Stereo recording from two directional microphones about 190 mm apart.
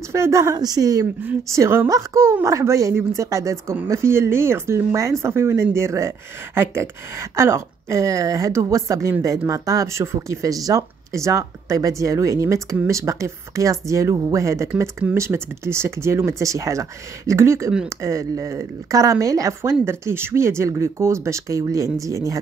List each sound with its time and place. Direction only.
0.1 s speech: 15° right (ahead or behind)